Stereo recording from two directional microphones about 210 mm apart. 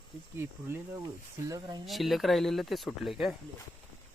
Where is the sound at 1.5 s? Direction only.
20° right (ahead or behind).